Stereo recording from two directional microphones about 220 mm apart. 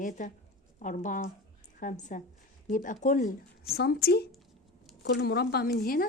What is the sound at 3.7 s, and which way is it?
A woman's voice, 45° left (ahead or behind).